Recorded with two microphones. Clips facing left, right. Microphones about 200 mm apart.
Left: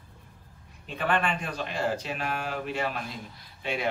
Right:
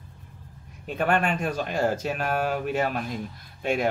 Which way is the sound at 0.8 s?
45° right (ahead or behind).